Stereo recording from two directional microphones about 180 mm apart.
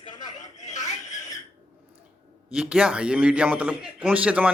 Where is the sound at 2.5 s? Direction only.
5° right (ahead or behind).